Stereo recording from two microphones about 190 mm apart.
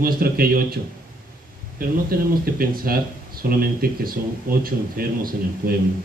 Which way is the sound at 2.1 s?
50° right (ahead or behind).